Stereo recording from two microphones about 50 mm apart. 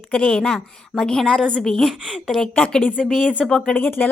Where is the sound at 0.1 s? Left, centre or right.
Left.